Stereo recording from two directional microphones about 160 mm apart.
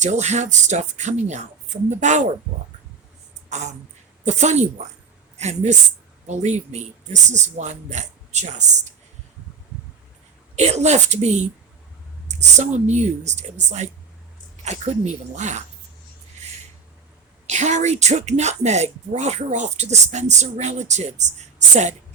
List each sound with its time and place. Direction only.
0.0 s a woman's voice: 45° right (ahead or behind)
3.5 s a woman's voice: 45° right (ahead or behind)
10.5 s a woman's voice: 45° right (ahead or behind)
17.4 s a woman's voice: 50° right (ahead or behind)